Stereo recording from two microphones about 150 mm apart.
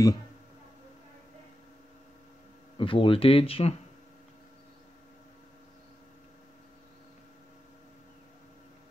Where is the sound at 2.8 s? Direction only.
35° left (ahead or behind).